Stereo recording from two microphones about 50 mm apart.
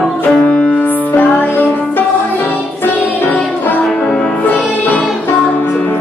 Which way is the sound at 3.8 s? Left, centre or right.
Centre.